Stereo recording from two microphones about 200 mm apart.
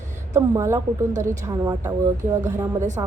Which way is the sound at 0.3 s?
15° right (ahead or behind).